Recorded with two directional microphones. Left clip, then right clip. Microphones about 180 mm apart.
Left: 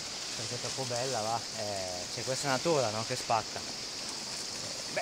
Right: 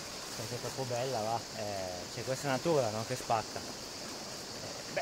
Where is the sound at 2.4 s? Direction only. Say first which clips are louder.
Left 1 dB; 25° left (ahead or behind).